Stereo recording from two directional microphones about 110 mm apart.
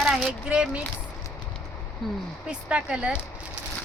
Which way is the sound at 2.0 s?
Centre (ahead or behind).